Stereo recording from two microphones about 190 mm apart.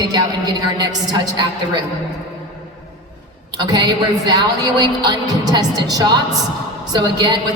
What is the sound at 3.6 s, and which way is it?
A woman's voice, 20° right (ahead or behind).